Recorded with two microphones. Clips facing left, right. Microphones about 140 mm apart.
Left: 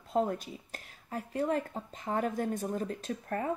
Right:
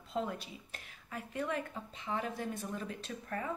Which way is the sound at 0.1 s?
45° left (ahead or behind).